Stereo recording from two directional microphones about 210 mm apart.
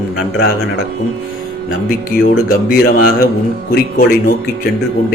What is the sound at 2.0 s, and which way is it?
Speech, 45° left (ahead or behind).